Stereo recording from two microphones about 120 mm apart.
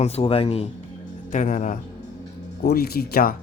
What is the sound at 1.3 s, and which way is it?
Speech, 90° left.